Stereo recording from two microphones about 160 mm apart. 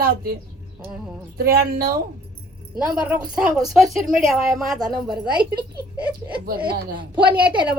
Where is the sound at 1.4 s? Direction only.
65° right (ahead or behind).